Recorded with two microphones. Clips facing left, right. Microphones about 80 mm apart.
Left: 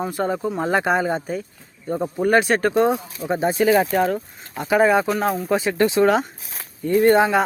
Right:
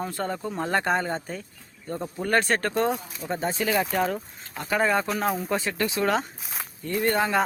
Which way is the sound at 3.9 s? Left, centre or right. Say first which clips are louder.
Left 6 dB; centre.